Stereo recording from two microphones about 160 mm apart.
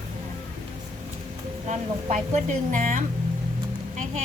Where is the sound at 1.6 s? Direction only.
45° right (ahead or behind).